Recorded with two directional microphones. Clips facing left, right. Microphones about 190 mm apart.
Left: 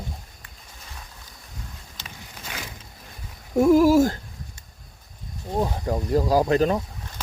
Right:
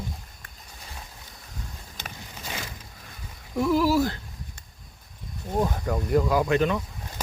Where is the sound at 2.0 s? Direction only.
55° right (ahead or behind).